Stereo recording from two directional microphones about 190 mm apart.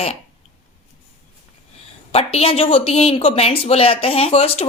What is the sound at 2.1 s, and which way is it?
A woman's voice, 30° left (ahead or behind).